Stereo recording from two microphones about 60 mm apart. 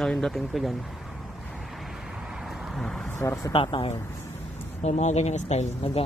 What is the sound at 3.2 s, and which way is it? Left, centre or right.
Speech, left.